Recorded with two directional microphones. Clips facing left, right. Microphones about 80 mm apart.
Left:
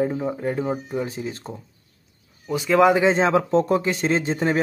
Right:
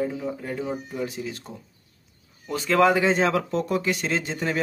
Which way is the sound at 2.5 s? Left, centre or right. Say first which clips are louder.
Left 3 dB; centre.